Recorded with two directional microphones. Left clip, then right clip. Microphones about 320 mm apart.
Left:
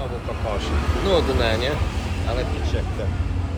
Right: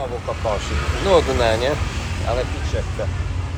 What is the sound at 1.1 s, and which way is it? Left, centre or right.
Vehicle, centre.